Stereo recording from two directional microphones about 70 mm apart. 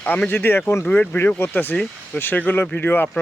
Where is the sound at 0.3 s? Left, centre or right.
Left.